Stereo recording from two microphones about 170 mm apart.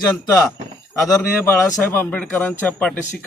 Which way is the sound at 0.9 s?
15° left (ahead or behind).